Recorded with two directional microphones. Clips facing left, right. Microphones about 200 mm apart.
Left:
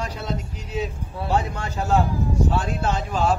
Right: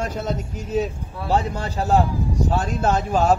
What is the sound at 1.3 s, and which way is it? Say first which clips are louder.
A man's voice: right 3 dB; 35° right (ahead or behind).